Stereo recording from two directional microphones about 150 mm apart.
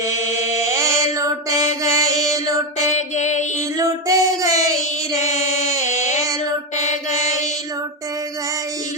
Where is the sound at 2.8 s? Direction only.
50° left (ahead or behind).